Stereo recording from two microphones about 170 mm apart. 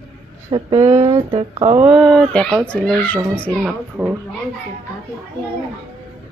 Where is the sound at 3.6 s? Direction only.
10° right (ahead or behind).